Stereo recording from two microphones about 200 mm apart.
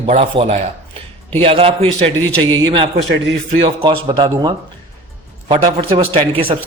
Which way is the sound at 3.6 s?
25° right (ahead or behind).